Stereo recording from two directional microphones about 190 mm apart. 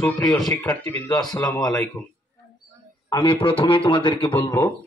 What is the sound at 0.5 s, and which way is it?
Speech, 15° left (ahead or behind).